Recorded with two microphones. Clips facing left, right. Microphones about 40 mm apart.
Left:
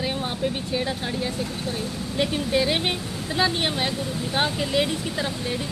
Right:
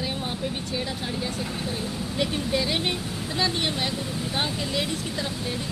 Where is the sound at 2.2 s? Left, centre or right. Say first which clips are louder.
Left 4 dB; centre.